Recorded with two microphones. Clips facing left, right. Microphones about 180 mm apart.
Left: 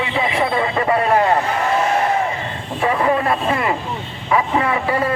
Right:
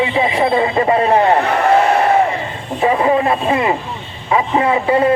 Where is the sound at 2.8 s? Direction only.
20° right (ahead or behind).